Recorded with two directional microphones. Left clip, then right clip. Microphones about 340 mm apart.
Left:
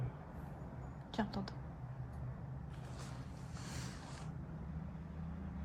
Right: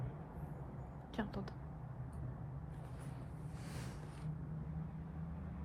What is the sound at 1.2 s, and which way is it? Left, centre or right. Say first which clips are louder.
Speech: left 3 dB; centre.